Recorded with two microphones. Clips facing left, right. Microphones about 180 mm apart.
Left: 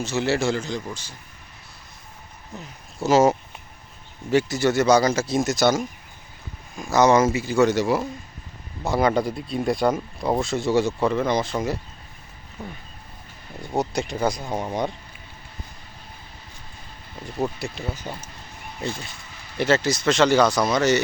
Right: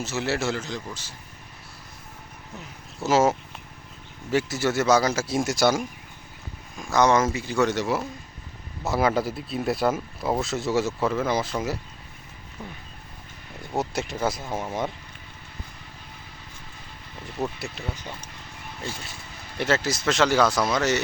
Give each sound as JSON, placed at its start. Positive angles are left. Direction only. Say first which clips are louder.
{"t": 0.0, "sound": "speech", "louder": "left 4 dB", "side_deg": -5}
{"t": 3.0, "sound": "speech", "louder": "left 3 dB", "side_deg": 0}
{"t": 6.7, "sound": "speech", "louder": "left 3 dB", "side_deg": 0}
{"t": 12.6, "sound": "a sound", "louder": "left 3 dB", "side_deg": 25}
{"t": 13.7, "sound": "speech", "louder": "left 3 dB", "side_deg": -5}
{"t": 17.6, "sound": "speech", "louder": "left 4 dB", "side_deg": -5}
{"t": 19.5, "sound": "speech", "louder": "left 4 dB", "side_deg": 0}